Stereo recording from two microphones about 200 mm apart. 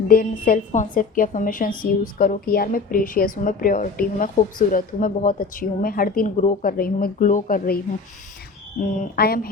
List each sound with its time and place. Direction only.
0.1 s a woman's voice: 45° left (ahead or behind)
8.8 s a woman's voice: 45° left (ahead or behind)